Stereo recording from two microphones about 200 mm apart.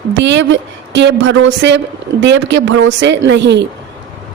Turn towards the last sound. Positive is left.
turn(degrees=-60)  # may be behind; listen again after turning